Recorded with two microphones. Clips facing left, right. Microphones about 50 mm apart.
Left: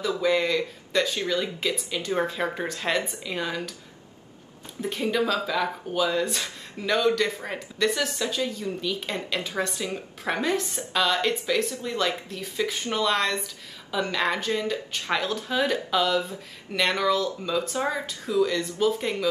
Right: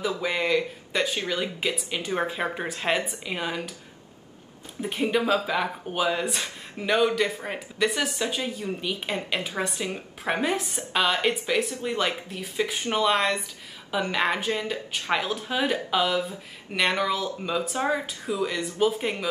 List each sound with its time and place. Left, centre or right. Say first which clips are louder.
0.0 s speech: left 3 dB; centre
5.0 s speech: right 2 dB; right